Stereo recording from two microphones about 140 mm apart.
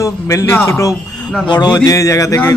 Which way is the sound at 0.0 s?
20° left (ahead or behind).